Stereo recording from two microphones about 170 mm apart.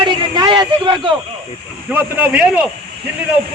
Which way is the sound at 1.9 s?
10° right (ahead or behind).